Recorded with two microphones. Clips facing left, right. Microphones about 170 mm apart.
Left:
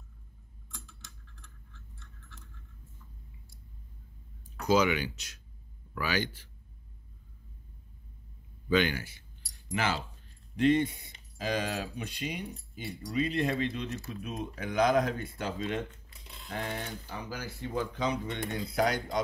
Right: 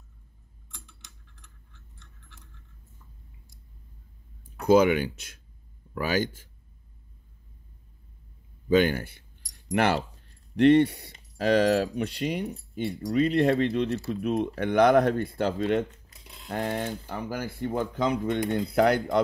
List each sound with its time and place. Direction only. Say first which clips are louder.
0.8 s a sound: left 2 dB; 15° right (ahead or behind)
4.6 s speech: right 7 dB; 55° right (ahead or behind)
8.6 s speech: right 6 dB; 45° right (ahead or behind)
9.7 s speech: right 8 dB; 65° right (ahead or behind)
16.4 s speech: right 7 dB; 45° right (ahead or behind)
18.5 s speech: right 6 dB; 60° right (ahead or behind)